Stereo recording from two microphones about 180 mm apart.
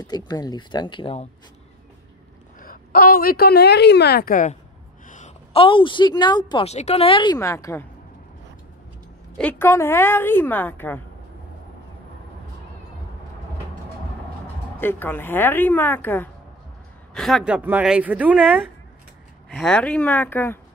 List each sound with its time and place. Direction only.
0.0 s speech: 20° left (ahead or behind)
2.6 s a woman's voice: 55° left (ahead or behind); by 7.3 s 30° left (ahead or behind)
7.3 s a woman's voice: 15° left (ahead or behind)
9.4 s a woman's voice: 10° left (ahead or behind)
14.8 s a woman's voice: 10° left (ahead or behind); by 18.4 s 10° right (ahead or behind)
19.5 s a woman's voice: 5° left (ahead or behind)